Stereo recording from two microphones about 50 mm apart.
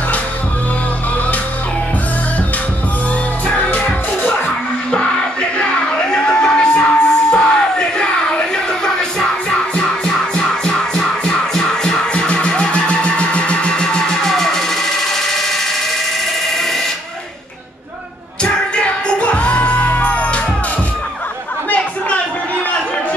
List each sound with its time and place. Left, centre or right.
3.4 s music: left
5.6 s music: centre
18.4 s music: centre